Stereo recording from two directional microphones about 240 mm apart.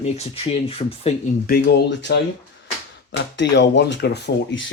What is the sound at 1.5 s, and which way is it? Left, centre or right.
Speech, left.